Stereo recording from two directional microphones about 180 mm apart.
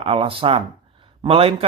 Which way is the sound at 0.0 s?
30° right (ahead or behind).